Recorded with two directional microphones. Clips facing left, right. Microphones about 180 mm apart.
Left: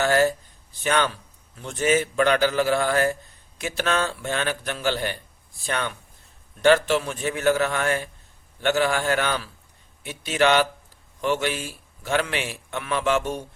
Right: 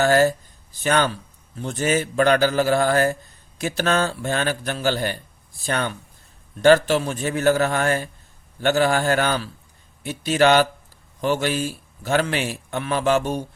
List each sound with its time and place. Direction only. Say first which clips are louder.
0.0 s a man's voice: right 3 dB; 40° right (ahead or behind)